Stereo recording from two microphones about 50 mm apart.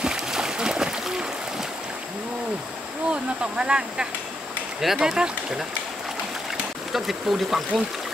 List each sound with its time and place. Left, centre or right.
0.0 s a sound: centre
3.1 s speech: centre
6.9 s speech: centre